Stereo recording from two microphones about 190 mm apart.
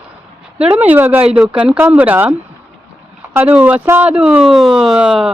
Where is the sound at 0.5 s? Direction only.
5° right (ahead or behind).